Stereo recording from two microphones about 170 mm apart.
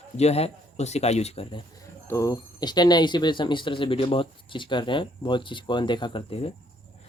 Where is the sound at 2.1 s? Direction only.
20° left (ahead or behind); by 6.5 s 35° left (ahead or behind).